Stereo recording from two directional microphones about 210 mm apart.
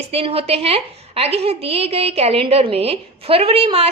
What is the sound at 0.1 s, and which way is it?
A woman's voice, 30° right (ahead or behind).